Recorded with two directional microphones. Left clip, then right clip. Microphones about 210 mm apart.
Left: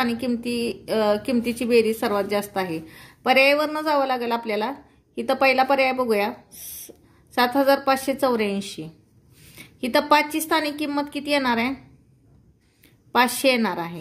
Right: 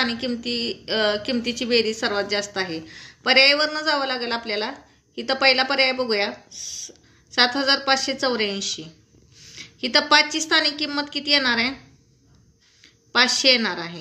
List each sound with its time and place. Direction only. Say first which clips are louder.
0.0 s a woman's voice: even; 50° left (ahead or behind)
12.8 s a woman's voice: right 1 dB; 50° left (ahead or behind)